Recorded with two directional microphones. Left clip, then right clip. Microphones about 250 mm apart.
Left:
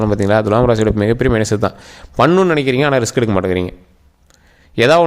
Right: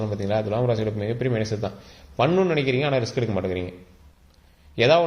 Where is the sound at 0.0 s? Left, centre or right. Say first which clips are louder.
Left 11 dB; left.